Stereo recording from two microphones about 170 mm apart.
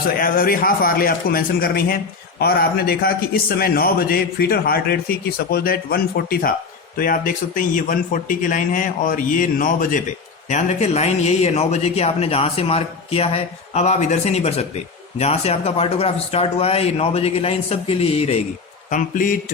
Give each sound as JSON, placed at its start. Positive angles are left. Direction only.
{"t": 0.0, "sound": "a man's voice", "side_deg": 60}
{"t": 10.5, "sound": "speech", "side_deg": 40}
{"t": 18.9, "sound": "a man's voice", "side_deg": 50}